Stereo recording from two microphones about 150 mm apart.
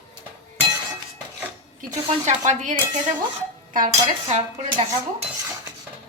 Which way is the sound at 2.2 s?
50° right (ahead or behind).